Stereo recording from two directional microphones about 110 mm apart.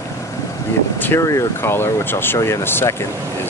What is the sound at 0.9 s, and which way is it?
Speech, 20° left (ahead or behind).